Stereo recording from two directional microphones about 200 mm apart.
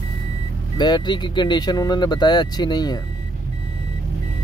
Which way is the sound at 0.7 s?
20° left (ahead or behind).